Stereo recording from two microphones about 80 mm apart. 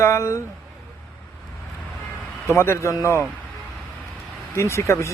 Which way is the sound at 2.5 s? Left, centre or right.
Left.